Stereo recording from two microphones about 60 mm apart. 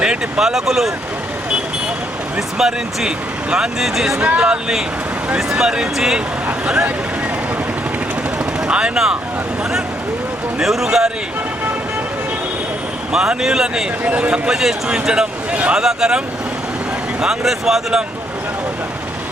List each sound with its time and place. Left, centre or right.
0.0 s speech: centre
2.6 s speech: centre
4.2 s speech: centre
5.4 s speech: centre
8.6 s speech: centre
10.6 s speech: centre
13.1 s speech: centre
14.0 s speech: right
14.5 s speech: centre